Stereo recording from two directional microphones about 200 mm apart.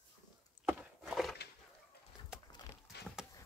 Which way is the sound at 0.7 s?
5° right (ahead or behind).